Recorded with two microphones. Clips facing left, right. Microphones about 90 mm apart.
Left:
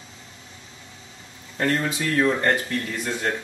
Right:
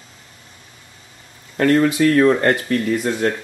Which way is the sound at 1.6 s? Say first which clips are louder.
Right 9 dB; 60° right (ahead or behind).